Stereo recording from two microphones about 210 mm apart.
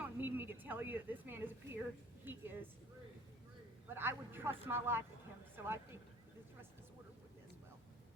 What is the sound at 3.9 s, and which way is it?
Speech, 10° right (ahead or behind).